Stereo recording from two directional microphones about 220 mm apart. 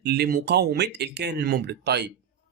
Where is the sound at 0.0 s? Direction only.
50° right (ahead or behind).